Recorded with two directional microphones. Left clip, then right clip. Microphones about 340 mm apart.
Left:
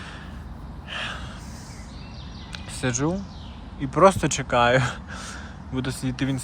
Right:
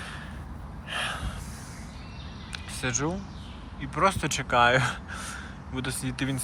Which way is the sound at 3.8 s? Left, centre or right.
Centre.